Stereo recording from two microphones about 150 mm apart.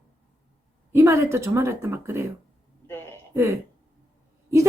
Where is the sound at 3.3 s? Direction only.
20° right (ahead or behind).